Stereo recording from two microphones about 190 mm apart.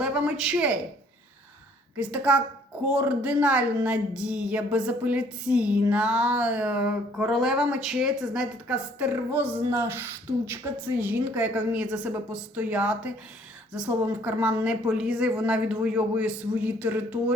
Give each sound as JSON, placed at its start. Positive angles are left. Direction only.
{"t": 0.0, "sound": "a woman's voice", "side_deg": -5}
{"t": 2.0, "sound": "speech", "side_deg": -5}